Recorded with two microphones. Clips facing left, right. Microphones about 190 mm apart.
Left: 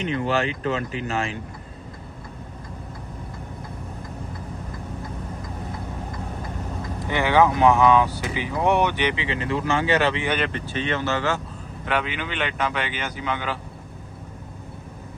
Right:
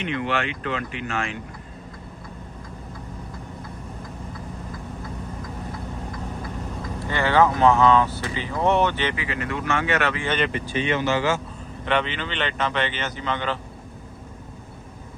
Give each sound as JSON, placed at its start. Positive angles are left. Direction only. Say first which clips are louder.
{"t": 0.0, "sound": "speech", "louder": "left 2 dB", "side_deg": 35}
{"t": 7.1, "sound": "speech", "louder": "left 1 dB", "side_deg": 15}
{"t": 10.2, "sound": "speech", "louder": "even", "side_deg": 5}
{"t": 10.5, "sound": "speech", "louder": "right 2 dB", "side_deg": -15}
{"t": 11.9, "sound": "speech", "louder": "right 2 dB", "side_deg": 5}